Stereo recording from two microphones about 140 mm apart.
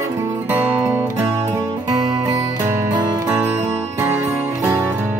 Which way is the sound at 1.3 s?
20° right (ahead or behind).